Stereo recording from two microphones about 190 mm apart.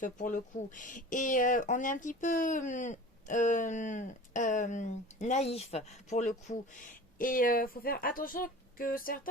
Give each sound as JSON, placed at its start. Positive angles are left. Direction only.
{"t": 0.0, "sound": "speech", "side_deg": 45}